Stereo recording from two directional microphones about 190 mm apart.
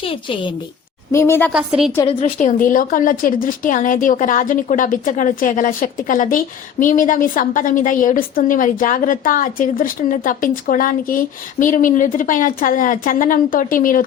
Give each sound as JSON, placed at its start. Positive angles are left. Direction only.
{"t": 0.0, "sound": "a woman's voice", "side_deg": 30}
{"t": 1.1, "sound": "a woman's voice", "side_deg": 15}
{"t": 1.5, "sound": "a woman's voice", "side_deg": 0}
{"t": 2.0, "sound": "a woman's voice", "side_deg": 30}
{"t": 2.6, "sound": "a woman's voice", "side_deg": 45}